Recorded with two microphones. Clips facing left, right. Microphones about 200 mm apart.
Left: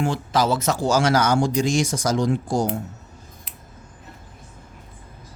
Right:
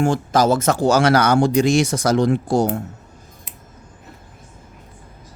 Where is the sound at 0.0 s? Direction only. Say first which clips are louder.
Right 5 dB; 45° right (ahead or behind); by 2.7 s 65° right (ahead or behind).